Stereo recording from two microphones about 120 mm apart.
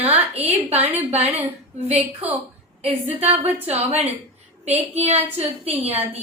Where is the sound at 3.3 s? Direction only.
60° right (ahead or behind).